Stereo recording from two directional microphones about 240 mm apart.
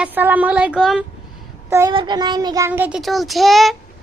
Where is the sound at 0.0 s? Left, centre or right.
Centre.